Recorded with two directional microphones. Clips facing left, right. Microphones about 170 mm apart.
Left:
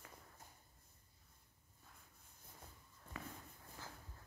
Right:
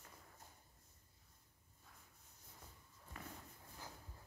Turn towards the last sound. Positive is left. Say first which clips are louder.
# left 3 dB
turn(degrees=90)